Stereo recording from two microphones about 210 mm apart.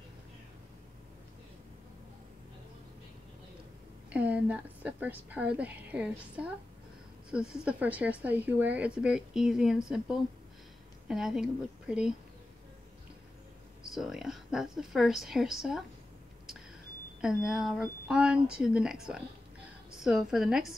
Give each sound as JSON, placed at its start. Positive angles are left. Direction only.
{"t": 4.1, "sound": "a woman's voice", "side_deg": -5}
{"t": 13.9, "sound": "speech", "side_deg": 0}
{"t": 17.2, "sound": "speech", "side_deg": 0}